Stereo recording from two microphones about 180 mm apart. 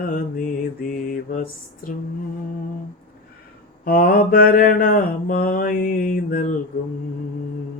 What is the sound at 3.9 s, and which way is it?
Mantra, 50° left (ahead or behind).